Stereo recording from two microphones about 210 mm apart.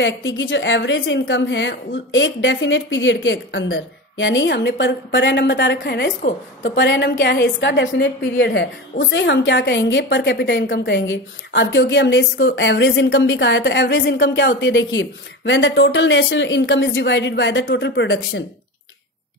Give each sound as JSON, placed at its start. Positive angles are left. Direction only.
{"t": 0.0, "sound": "a woman's voice", "side_deg": 60}